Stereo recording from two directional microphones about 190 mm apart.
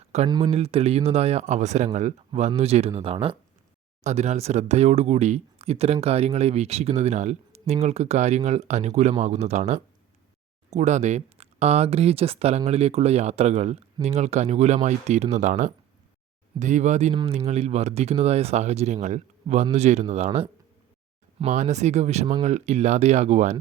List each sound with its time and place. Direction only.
0.3 s speech: 20° right (ahead or behind)